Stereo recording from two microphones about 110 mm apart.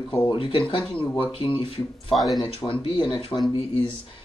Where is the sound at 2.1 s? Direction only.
Centre (ahead or behind).